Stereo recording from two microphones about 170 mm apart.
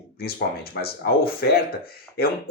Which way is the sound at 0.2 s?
65° left (ahead or behind).